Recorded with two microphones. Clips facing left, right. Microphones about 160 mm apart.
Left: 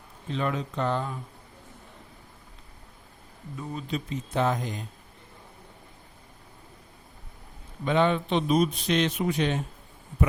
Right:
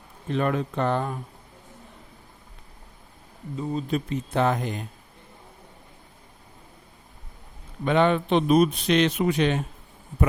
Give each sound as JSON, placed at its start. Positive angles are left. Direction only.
{"t": 0.3, "sound": "speech", "side_deg": -55}
{"t": 3.5, "sound": "speech", "side_deg": -25}
{"t": 3.8, "sound": "speech", "side_deg": -55}
{"t": 7.9, "sound": "speech", "side_deg": -60}